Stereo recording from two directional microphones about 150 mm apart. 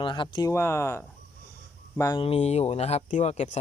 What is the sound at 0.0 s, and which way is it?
Speech, 30° left (ahead or behind).